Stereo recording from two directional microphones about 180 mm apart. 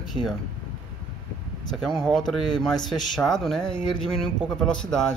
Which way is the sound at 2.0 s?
Centre (ahead or behind).